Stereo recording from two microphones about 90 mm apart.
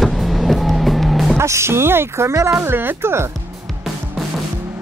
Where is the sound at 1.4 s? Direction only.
30° right (ahead or behind).